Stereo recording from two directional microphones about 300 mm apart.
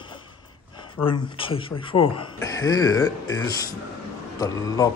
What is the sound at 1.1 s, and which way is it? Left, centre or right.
Speech, centre.